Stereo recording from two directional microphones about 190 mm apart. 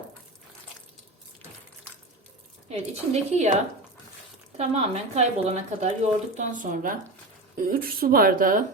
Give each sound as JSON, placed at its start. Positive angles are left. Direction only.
{"t": 2.6, "sound": "speech", "side_deg": -35}
{"t": 4.5, "sound": "a woman's voice", "side_deg": -35}